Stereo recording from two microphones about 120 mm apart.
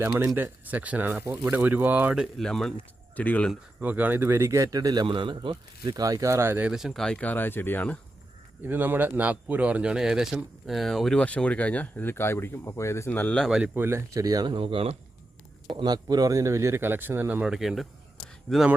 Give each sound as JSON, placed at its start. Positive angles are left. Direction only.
{"t": 0.3, "sound": "speech", "side_deg": -15}
{"t": 1.2, "sound": "speech", "side_deg": -25}
{"t": 1.5, "sound": "speech", "side_deg": -15}
{"t": 2.2, "sound": "a man's voice", "side_deg": 5}
{"t": 3.8, "sound": "speech", "side_deg": -15}
{"t": 5.0, "sound": "speech", "side_deg": -45}
{"t": 6.7, "sound": "speech", "side_deg": -5}
{"t": 8.6, "sound": "a man's voice", "side_deg": -15}
{"t": 13.3, "sound": "a man's voice", "side_deg": 5}
{"t": 13.6, "sound": "speech", "side_deg": -20}
{"t": 15.7, "sound": "a man's voice", "side_deg": -35}